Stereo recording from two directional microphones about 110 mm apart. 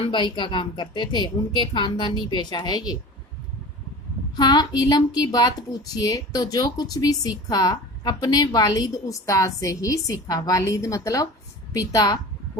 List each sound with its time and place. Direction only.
0.1 s a woman's voice: 45° left (ahead or behind)
4.4 s a woman's voice: 40° left (ahead or behind)